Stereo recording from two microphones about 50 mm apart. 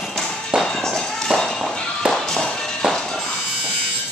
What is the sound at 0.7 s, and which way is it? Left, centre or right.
Fireworks, centre.